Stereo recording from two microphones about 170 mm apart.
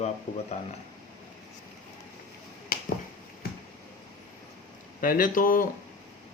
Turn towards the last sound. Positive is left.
turn(degrees=55)  # may be behind; listen again after turning